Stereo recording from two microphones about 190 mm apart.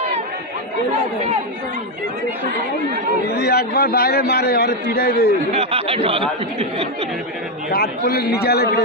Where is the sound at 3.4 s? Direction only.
55° left (ahead or behind).